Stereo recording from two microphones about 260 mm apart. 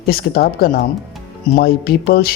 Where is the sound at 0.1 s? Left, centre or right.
Left.